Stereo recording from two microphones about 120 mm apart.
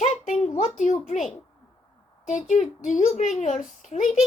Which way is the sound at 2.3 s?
90° left.